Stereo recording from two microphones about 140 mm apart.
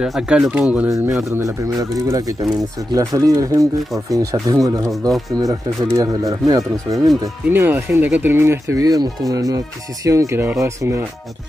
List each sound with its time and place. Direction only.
0.0 s speech: 5° right (ahead or behind)
0.8 s speech: 25° right (ahead or behind)
7.4 s speech: 15° right (ahead or behind)